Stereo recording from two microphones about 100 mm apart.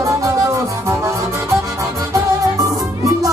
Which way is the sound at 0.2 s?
30° right (ahead or behind).